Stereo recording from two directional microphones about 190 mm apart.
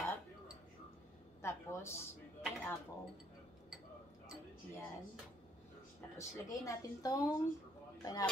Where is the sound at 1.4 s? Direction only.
15° left (ahead or behind).